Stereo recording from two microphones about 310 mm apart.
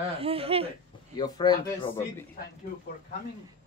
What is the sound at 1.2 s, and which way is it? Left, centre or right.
Speech, centre.